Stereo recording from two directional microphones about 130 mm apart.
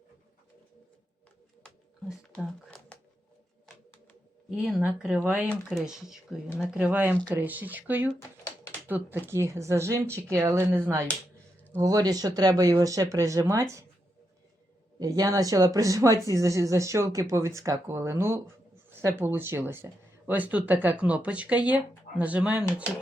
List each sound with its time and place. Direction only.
1.6 s a sound: centre (ahead or behind)
4.8 s speech: 10° right (ahead or behind)
5.5 s speech: centre (ahead or behind); by 13.8 s 25° right (ahead or behind)
14.9 s speech: 30° right (ahead or behind); by 22.6 s 10° right (ahead or behind)